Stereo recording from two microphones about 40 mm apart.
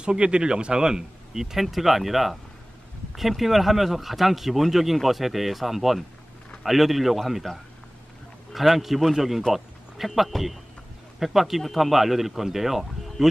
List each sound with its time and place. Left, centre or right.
0.0 s speech: right; by 13.3 s centre